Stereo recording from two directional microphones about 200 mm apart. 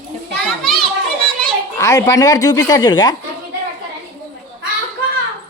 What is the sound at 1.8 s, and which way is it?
Speech, 15° left (ahead or behind).